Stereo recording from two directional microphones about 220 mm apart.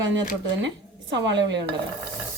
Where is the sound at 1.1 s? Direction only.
55° right (ahead or behind).